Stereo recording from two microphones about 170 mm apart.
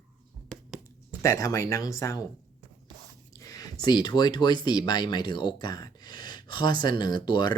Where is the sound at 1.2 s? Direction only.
20° left (ahead or behind).